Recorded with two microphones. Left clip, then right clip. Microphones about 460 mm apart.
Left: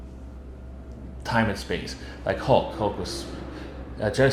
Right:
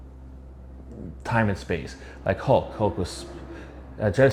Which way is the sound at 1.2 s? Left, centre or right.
Right.